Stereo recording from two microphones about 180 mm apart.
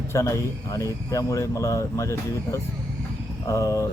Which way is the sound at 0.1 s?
15° left (ahead or behind).